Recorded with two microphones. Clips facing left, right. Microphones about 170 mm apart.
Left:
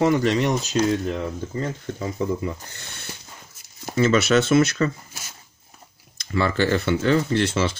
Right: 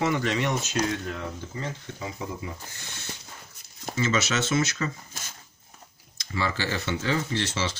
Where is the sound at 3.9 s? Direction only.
55° left (ahead or behind).